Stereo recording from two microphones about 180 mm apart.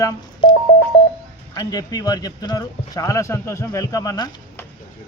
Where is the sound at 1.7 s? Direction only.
20° left (ahead or behind).